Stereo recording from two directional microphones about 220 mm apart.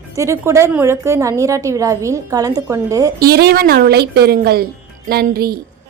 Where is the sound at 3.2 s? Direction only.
45° right (ahead or behind).